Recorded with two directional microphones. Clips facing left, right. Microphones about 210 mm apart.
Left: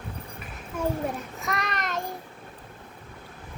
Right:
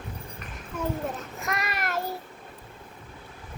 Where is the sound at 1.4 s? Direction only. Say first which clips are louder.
Right 1 dB; centre (ahead or behind).